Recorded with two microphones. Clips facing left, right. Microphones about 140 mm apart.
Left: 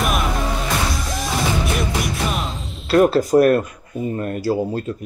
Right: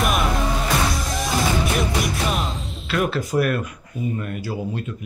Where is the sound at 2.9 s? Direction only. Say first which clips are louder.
Left 9 dB; 35° left (ahead or behind).